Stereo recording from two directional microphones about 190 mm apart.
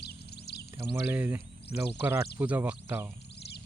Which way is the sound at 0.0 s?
60° left (ahead or behind).